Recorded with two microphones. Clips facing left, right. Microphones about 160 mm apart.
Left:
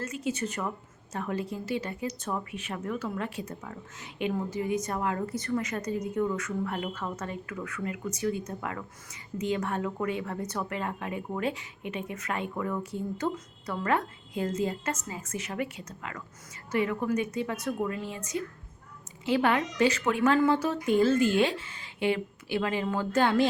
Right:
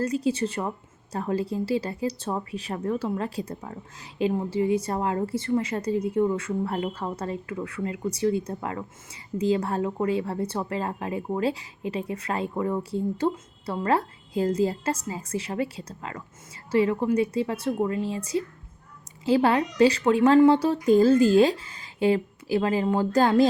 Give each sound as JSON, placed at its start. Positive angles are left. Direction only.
{"t": 0.0, "sound": "a woman's voice", "side_deg": -35}